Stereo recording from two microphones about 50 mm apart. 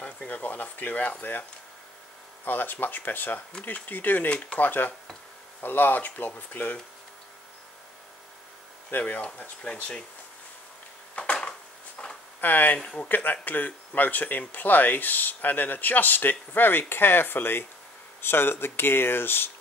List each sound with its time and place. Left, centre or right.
0.0 s speech: left
2.4 s speech: left
4.3 s speech: left
4.6 s speech: left
8.9 s speech: left
12.0 s a sound: left
12.4 s speech: left